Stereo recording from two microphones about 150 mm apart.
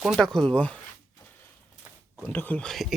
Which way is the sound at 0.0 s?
Centre (ahead or behind).